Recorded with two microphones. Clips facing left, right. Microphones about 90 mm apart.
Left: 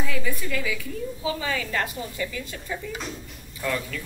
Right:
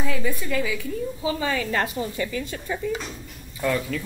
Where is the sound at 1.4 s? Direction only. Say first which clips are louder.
Right 3 dB; 35° right (ahead or behind).